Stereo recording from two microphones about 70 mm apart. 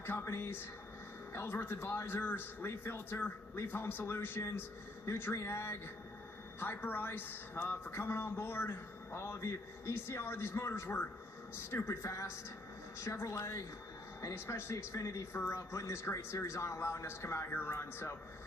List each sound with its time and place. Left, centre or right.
0.0 s a man's voice: left
14.9 s a man's voice: left